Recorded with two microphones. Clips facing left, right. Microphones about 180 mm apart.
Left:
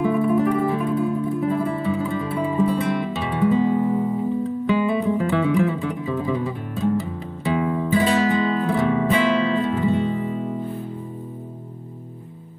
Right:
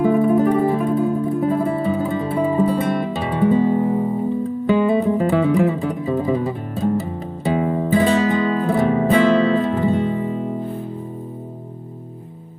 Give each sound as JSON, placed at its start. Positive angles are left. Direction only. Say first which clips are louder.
{"t": 0.0, "sound": "music", "louder": "right 4 dB", "side_deg": -40}